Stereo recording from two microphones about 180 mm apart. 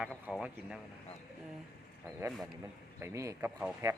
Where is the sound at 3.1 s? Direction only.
15° right (ahead or behind).